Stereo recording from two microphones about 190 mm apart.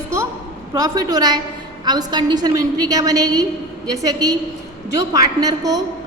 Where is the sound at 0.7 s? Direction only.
20° right (ahead or behind).